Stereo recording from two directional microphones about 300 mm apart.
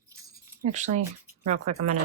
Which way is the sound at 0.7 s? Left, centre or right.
Right.